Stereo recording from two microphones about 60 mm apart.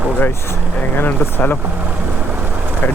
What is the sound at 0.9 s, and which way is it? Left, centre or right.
Speech, left.